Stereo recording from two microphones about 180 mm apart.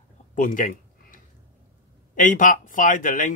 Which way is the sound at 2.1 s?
45° left (ahead or behind).